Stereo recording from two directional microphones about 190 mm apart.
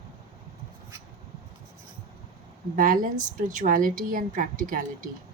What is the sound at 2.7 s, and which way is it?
A woman's voice, 45° right (ahead or behind).